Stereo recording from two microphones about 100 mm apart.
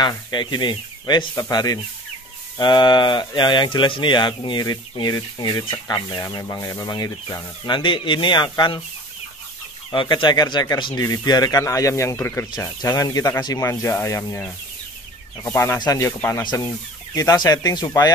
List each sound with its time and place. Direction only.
0.3 s speech: 50° left (ahead or behind)
7.2 s speech: 55° left (ahead or behind)
9.8 s speech: 55° left (ahead or behind); by 12.4 s 25° left (ahead or behind)
12.5 s speech: 35° left (ahead or behind)